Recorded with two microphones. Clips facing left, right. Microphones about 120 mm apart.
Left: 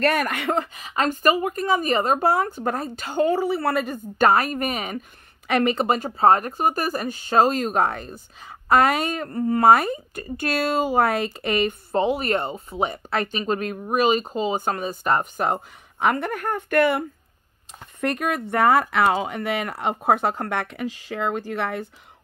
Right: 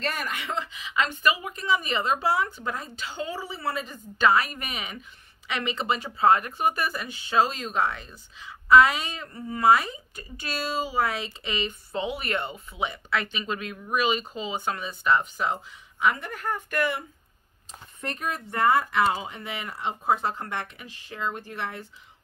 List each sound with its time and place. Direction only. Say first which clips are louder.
0.0 s speech: left 10 dB; 60° left (ahead or behind)
17.7 s speech: left 10 dB; 70° left (ahead or behind)